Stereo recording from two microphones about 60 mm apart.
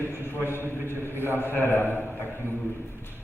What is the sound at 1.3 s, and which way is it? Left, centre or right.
Speech, left.